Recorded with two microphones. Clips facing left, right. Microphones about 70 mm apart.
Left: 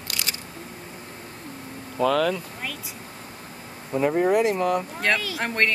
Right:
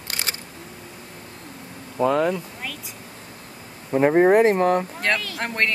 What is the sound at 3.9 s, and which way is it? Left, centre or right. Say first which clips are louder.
Speech: right 5 dB; right.